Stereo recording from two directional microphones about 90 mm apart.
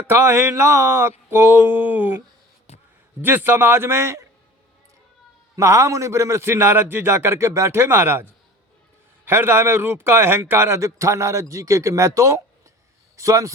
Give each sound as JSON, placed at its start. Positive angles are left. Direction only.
{"t": 0.1, "sound": "a man's voice", "side_deg": -25}
{"t": 5.5, "sound": "a man's voice", "side_deg": -35}
{"t": 9.2, "sound": "speech", "side_deg": -25}